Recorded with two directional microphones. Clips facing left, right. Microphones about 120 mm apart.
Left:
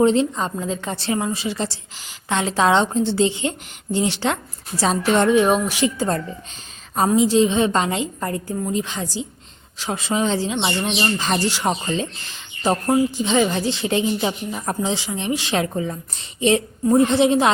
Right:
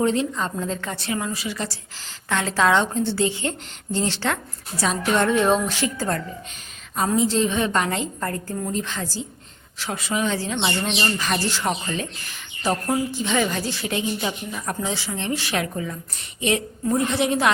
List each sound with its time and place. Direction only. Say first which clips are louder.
0.0 s speech: left 5 dB; 20° left (ahead or behind)
0.5 s a woman's voice: left 2 dB; 10° left (ahead or behind)
0.9 s a woman's voice: left 4 dB; 30° left (ahead or behind)